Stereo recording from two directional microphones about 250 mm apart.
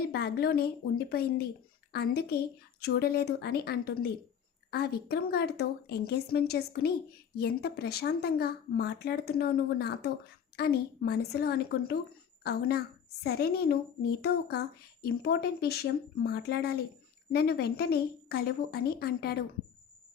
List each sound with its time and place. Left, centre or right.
0.1 s a woman's voice: left